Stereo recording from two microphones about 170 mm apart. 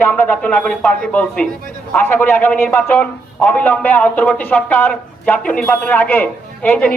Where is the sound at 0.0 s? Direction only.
10° left (ahead or behind).